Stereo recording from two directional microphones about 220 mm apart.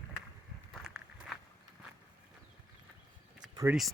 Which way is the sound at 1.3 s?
Centre (ahead or behind).